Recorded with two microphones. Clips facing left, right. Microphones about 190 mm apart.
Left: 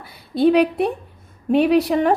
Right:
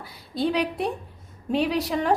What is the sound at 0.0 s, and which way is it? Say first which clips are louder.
A woman's voice: left 9 dB; 60° left (ahead or behind).